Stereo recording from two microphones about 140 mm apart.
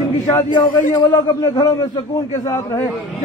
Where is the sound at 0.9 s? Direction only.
25° left (ahead or behind).